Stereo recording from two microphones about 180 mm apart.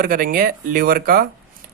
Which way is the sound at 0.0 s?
50° right (ahead or behind).